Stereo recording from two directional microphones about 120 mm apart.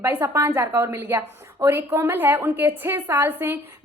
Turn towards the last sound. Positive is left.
turn(degrees=-15)  # may be behind; listen again after turning